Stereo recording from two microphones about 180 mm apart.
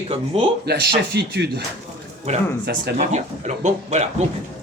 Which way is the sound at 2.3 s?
35° right (ahead or behind).